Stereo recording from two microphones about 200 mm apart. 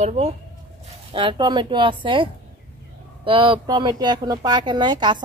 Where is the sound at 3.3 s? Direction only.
25° right (ahead or behind).